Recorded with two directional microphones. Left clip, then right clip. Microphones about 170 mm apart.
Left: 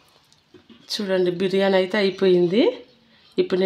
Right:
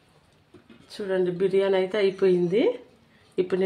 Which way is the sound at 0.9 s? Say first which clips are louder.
Left 4 dB; 85° left.